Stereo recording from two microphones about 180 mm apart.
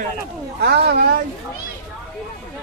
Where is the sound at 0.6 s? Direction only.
65° right (ahead or behind).